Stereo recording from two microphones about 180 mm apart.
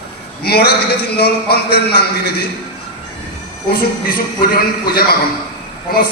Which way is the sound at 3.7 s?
55° left (ahead or behind).